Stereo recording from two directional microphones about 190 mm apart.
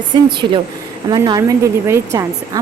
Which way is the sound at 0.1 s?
25° right (ahead or behind).